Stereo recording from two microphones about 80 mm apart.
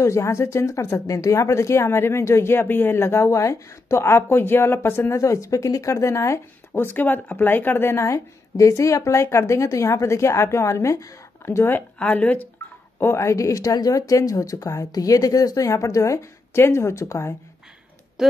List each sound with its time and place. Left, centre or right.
0.0 s speech: left
11.4 s speech: left
12.0 s speech: centre
13.0 s speech: left